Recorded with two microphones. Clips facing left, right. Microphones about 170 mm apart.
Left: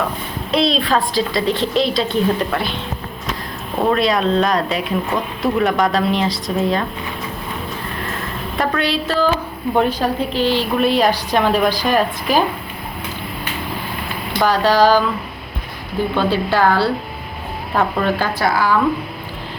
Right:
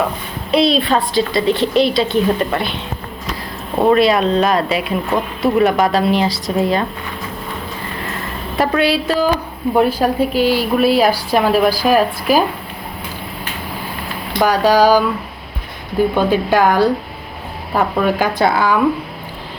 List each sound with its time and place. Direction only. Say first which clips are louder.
0.5 s a woman's voice: right 3 dB; centre (ahead or behind)
3.9 s a woman's voice: right 2 dB; 5° right (ahead or behind)
8.8 s a woman's voice: right 2 dB; 10° right (ahead or behind)
14.3 s a woman's voice: right 2 dB; 10° right (ahead or behind)
16.1 s a woman's voice: right 1 dB; 15° right (ahead or behind)